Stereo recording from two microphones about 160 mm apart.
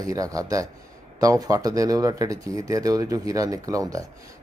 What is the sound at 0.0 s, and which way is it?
Speech, 20° right (ahead or behind).